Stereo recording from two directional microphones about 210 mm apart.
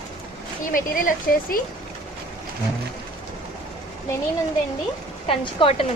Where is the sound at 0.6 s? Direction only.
40° left (ahead or behind).